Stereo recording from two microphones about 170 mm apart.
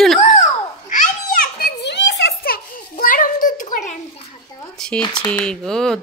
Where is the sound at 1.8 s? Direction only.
85° left; by 4.0 s 50° left (ahead or behind).